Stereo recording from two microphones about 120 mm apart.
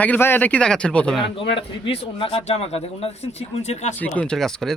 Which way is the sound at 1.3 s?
45° left (ahead or behind).